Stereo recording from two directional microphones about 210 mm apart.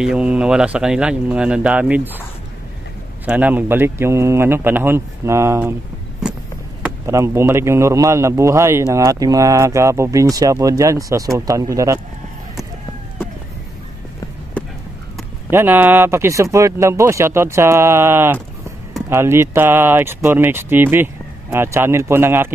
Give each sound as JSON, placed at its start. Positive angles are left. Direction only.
{"t": 0.0, "sound": "speech", "side_deg": -5}
{"t": 3.3, "sound": "speech", "side_deg": -5}
{"t": 7.1, "sound": "speech", "side_deg": -15}
{"t": 15.5, "sound": "speech", "side_deg": -10}